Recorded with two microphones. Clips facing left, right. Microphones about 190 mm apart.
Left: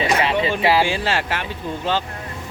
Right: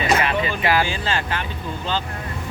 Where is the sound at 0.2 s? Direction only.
25° left (ahead or behind).